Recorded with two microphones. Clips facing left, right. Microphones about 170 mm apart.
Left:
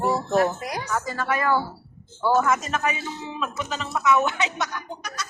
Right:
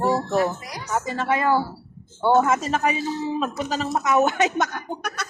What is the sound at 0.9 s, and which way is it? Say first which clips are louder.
A man's voice: right 4 dB; 25° right (ahead or behind).